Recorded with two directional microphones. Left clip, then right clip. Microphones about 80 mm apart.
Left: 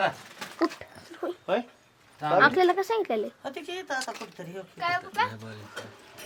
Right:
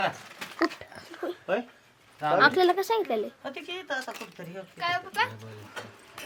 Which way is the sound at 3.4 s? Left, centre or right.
Left.